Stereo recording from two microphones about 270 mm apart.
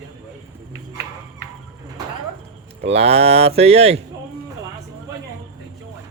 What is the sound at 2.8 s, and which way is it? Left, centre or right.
Speech, right.